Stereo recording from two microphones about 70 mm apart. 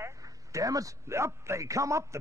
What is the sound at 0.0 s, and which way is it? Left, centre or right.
Speech, right.